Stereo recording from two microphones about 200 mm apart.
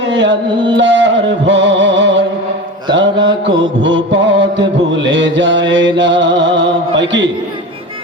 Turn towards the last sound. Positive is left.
turn(degrees=-70)  # may be behind; listen again after turning